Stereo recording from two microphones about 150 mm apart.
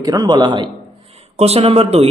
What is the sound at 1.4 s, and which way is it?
Speech, 45° right (ahead or behind).